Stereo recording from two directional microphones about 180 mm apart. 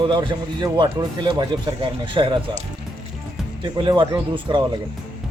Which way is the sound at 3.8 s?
25° right (ahead or behind).